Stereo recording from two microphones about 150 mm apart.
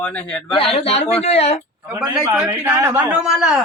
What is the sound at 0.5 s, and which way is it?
Speech, 40° left (ahead or behind).